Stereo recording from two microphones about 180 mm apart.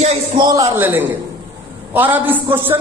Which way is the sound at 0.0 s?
35° right (ahead or behind).